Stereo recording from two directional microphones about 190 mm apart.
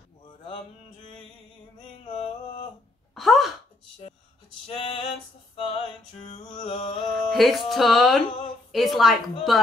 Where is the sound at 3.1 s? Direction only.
Centre (ahead or behind).